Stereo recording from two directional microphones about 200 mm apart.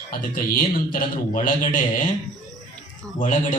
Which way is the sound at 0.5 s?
45° left (ahead or behind).